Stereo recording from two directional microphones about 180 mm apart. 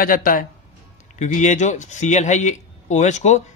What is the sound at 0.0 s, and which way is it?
Speech, 50° left (ahead or behind).